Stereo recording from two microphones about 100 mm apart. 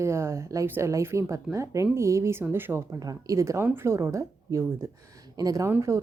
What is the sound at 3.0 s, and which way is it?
A woman's voice, 35° right (ahead or behind).